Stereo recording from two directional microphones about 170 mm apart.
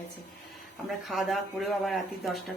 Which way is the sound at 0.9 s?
Centre (ahead or behind).